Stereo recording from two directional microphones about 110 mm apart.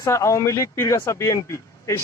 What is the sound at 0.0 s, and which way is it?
A man's voice, 25° left (ahead or behind).